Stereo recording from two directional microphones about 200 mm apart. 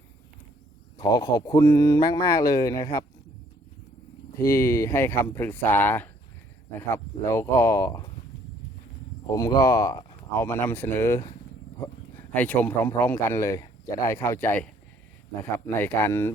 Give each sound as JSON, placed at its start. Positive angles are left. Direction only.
{"t": 0.9, "sound": "speech", "side_deg": 20}
{"t": 4.4, "sound": "speech", "side_deg": 15}
{"t": 9.3, "sound": "speech", "side_deg": 15}